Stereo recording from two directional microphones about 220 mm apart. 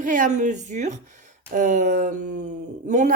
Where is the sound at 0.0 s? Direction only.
35° right (ahead or behind).